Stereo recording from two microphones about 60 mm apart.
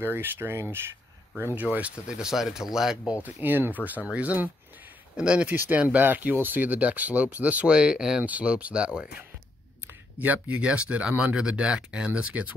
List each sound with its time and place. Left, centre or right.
0.0 s speech: right
1.6 s speech: right
2.0 s speech: centre
3.1 s speech: right
5.5 s speech: right
5.8 s speech: right
8.2 s speech: right
10.1 s speech: right